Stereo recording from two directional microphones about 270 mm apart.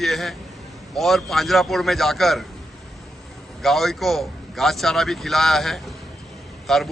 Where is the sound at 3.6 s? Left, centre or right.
Centre.